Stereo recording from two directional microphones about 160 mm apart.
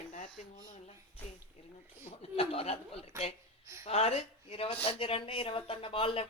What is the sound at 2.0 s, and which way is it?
Speech, 40° left (ahead or behind).